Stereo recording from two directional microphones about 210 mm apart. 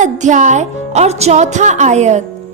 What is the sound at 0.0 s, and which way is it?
A woman's voice, 35° right (ahead or behind).